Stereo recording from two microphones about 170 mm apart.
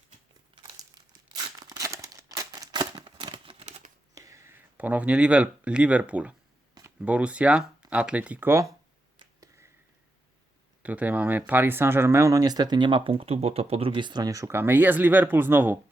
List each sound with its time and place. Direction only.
1.5 s a sound: 20° right (ahead or behind); by 3.9 s 40° right (ahead or behind)
4.1 s speech: 20° right (ahead or behind)
9.1 s finger snapping: 20° right (ahead or behind)
10.8 s speech: 10° right (ahead or behind)